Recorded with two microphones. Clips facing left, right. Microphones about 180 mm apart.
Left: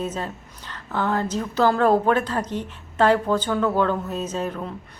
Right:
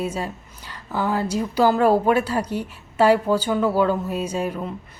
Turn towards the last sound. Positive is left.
turn(degrees=-5)  # may be behind; listen again after turning